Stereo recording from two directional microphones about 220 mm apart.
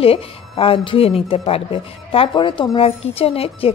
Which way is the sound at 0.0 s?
25° left (ahead or behind).